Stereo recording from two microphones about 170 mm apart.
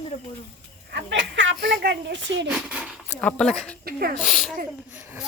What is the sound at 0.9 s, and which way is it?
Speech, 90° right.